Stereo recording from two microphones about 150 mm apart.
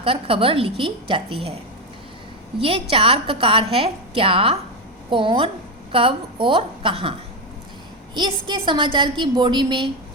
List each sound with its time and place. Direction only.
0.0 s a woman's voice: 35° right (ahead or behind)
2.6 s a woman's voice: 40° right (ahead or behind)
8.1 s a woman's voice: 30° right (ahead or behind)